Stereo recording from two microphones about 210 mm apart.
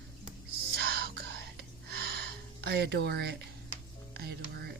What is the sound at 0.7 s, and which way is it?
Whispering, 50° right (ahead or behind).